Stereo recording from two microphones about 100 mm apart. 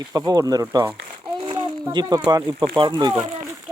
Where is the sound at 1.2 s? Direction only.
55° right (ahead or behind).